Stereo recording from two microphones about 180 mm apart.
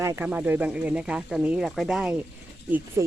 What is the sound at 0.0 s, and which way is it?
Speech, 15° right (ahead or behind).